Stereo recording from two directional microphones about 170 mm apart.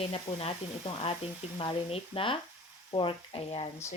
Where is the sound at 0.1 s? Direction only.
35° left (ahead or behind).